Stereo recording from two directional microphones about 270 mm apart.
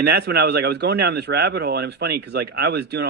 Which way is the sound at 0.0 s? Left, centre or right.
Right.